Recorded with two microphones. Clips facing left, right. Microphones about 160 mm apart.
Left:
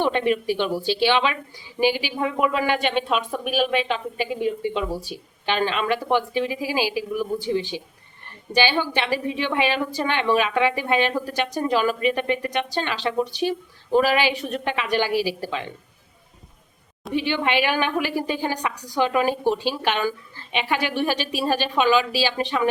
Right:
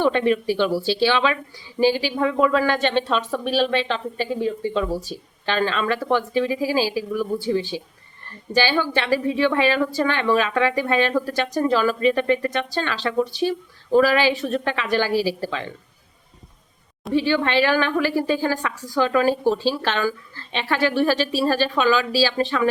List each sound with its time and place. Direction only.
0.0 s speech: 15° left (ahead or behind)
17.1 s speech: 15° left (ahead or behind)